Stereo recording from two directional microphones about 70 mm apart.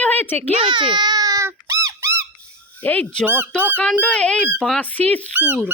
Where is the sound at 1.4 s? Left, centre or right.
Right.